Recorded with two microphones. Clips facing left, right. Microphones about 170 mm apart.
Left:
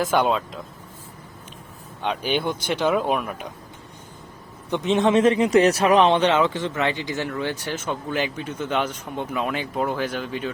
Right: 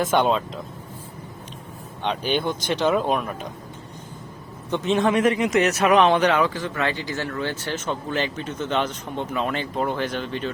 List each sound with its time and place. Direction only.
0.0 s speech: centre (ahead or behind)
2.0 s speech: 10° left (ahead or behind)
4.7 s speech: 20° left (ahead or behind)